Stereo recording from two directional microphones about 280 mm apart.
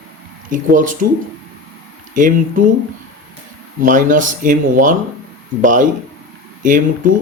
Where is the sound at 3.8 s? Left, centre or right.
Right.